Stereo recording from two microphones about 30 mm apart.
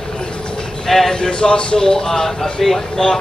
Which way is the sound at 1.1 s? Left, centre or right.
Centre.